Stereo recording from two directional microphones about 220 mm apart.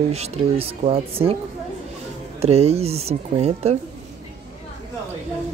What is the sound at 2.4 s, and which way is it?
Speech, 30° right (ahead or behind).